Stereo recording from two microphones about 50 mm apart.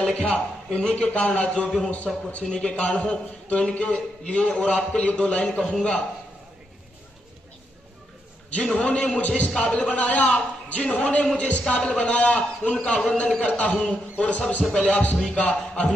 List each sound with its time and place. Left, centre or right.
0.1 s a man's voice: left
2.1 s a man's voice: centre
2.5 s a man's voice: left
8.7 s a man's voice: left